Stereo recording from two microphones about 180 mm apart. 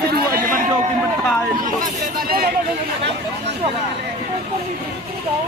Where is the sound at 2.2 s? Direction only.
55° right (ahead or behind).